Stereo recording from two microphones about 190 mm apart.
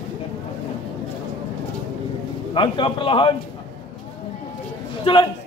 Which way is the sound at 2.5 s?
25° left (ahead or behind).